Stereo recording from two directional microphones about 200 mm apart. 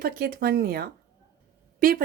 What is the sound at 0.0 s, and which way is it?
Speech, 50° right (ahead or behind).